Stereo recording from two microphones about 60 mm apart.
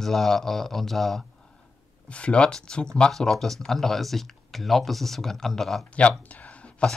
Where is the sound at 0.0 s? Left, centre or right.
Centre.